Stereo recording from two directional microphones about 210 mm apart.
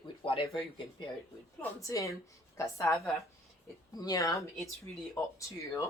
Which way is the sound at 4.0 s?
20° left (ahead or behind).